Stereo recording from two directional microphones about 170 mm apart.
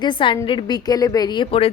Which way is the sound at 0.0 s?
30° left (ahead or behind).